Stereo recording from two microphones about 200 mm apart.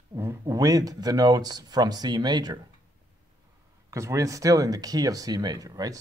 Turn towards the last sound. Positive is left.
turn(degrees=-20)  # may be behind; listen again after turning